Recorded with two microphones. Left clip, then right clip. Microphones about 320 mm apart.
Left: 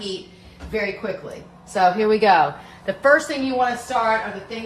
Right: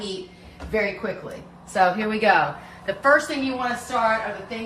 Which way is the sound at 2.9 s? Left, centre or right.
Left.